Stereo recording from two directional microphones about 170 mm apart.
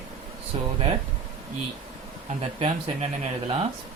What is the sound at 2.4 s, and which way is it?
Speech, 35° right (ahead or behind).